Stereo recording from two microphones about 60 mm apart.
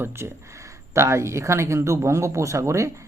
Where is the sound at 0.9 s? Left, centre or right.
Right.